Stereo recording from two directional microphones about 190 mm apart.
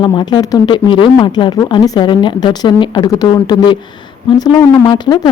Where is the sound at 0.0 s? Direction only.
25° left (ahead or behind).